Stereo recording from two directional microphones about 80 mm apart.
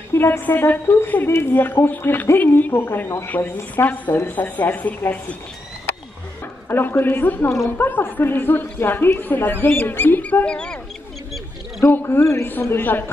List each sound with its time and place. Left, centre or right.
0.1 s speech: left
6.7 s speech: left; by 10.8 s centre
11.9 s speech: left